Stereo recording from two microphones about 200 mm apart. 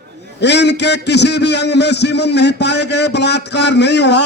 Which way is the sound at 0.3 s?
60° left (ahead or behind).